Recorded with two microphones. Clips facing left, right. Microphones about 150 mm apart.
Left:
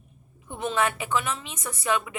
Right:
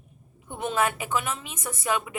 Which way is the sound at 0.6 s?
50° right (ahead or behind).